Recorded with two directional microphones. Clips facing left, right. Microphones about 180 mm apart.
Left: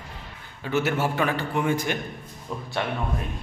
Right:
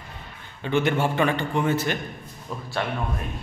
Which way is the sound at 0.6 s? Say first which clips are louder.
Right 2 dB; 5° left (ahead or behind).